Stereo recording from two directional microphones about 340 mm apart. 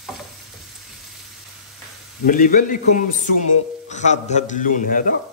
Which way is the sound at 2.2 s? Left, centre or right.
Left.